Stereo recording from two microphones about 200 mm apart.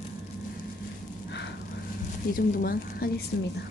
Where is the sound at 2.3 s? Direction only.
45° left (ahead or behind).